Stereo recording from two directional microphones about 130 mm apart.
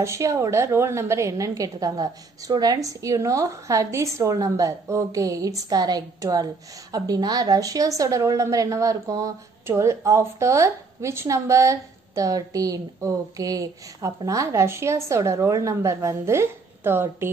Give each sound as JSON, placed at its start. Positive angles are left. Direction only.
{"t": 0.0, "sound": "a woman's voice", "side_deg": -25}